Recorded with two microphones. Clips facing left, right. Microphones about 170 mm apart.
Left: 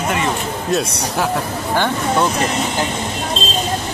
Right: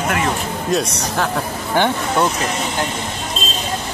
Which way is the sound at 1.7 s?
20° right (ahead or behind).